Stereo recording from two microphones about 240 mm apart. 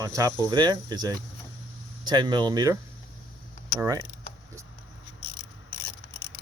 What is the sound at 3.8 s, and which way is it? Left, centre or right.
Speech, centre.